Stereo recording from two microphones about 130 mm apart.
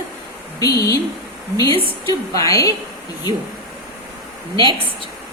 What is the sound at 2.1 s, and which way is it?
Speech, 25° left (ahead or behind).